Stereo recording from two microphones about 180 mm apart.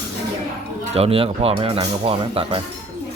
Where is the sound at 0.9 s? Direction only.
35° right (ahead or behind).